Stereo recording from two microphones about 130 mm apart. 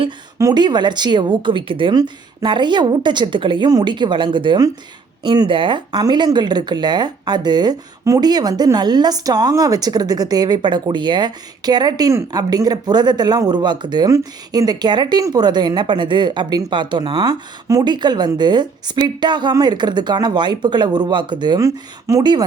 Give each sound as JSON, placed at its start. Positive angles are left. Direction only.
{"t": 0.3, "sound": "speech", "side_deg": -30}